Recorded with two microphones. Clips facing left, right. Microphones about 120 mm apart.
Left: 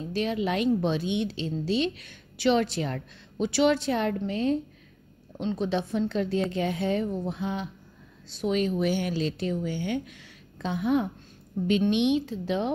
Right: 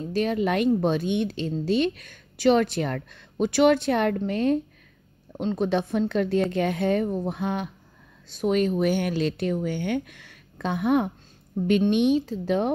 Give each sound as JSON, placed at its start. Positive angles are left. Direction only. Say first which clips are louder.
{"t": 0.1, "sound": "a woman's voice", "louder": "right 4 dB", "side_deg": -45}
{"t": 5.4, "sound": "speech", "louder": "right 3 dB", "side_deg": -45}
{"t": 11.9, "sound": "a woman's voice", "louder": "right 3 dB", "side_deg": -40}